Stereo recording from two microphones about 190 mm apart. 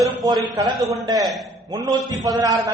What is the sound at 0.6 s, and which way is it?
Speech, 20° right (ahead or behind).